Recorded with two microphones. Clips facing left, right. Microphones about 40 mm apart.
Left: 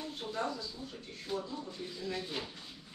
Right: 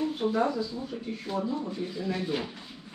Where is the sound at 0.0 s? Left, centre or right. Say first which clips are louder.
Right 11 dB; right.